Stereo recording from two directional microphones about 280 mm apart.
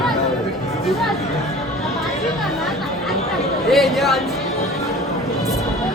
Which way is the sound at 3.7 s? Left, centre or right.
Centre.